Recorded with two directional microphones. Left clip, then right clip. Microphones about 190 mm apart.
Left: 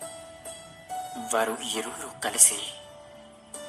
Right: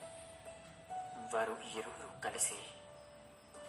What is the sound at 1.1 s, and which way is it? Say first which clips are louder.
A woman's voice: left 11 dB; 30° left (ahead or behind).